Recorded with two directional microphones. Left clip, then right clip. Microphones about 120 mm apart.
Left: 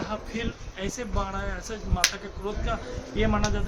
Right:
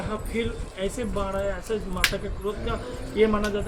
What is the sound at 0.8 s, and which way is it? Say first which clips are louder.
Speech: right 3 dB; 30° left (ahead or behind).